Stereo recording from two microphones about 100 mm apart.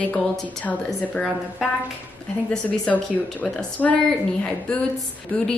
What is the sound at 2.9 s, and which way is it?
Speech, 5° left (ahead or behind).